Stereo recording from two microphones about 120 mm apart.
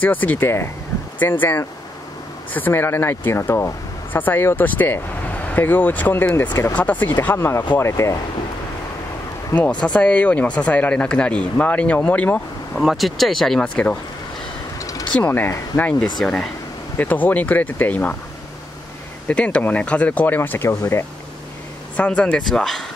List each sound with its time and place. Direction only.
0.0 s speech: 15° left (ahead or behind)
9.8 s speech: 10° left (ahead or behind)
12.7 s speech: centre (ahead or behind)
14.8 s vehicle: 30° left (ahead or behind)
15.1 s speech: 15° left (ahead or behind)
19.2 s speech: 10° left (ahead or behind)
21.9 s speech: 10° left (ahead or behind)